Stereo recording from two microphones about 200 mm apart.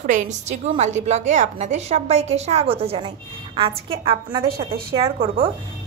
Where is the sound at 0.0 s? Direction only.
35° right (ahead or behind).